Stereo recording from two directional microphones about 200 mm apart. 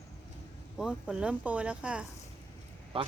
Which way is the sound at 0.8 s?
5° right (ahead or behind).